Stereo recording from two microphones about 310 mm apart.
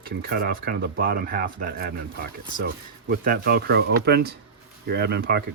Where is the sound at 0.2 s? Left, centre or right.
Right.